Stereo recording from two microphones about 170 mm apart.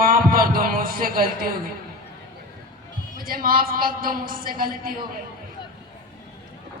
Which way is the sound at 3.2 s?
55° right (ahead or behind).